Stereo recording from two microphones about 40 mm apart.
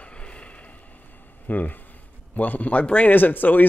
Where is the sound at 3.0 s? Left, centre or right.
Left.